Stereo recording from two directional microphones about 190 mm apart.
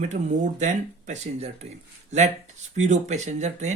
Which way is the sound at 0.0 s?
40° right (ahead or behind).